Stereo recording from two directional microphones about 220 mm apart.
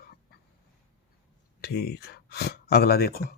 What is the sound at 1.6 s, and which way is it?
Speech, 45° left (ahead or behind).